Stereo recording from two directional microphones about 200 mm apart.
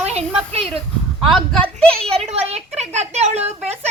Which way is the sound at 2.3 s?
35° right (ahead or behind).